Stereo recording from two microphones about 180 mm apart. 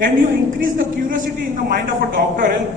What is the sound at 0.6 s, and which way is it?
A man's voice, 50° right (ahead or behind).